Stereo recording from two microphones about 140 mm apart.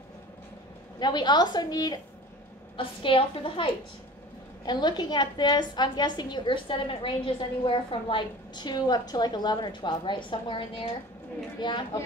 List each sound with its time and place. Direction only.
0.9 s a woman's voice: 30° left (ahead or behind)
4.6 s a woman's voice: 30° left (ahead or behind)